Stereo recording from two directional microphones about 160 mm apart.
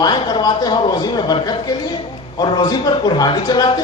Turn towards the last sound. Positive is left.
turn(degrees=30)  # may be behind; listen again after turning